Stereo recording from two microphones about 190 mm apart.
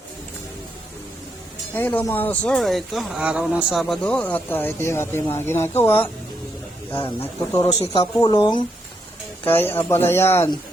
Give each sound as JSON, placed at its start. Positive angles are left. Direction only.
{"t": 1.7, "sound": "speech", "side_deg": 10}
{"t": 7.6, "sound": "speech", "side_deg": 30}